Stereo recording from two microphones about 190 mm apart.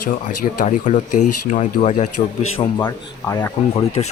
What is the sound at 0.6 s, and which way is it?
Speech, 40° left (ahead or behind).